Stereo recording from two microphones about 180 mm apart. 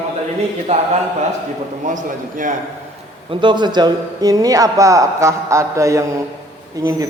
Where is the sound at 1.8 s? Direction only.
45° right (ahead or behind).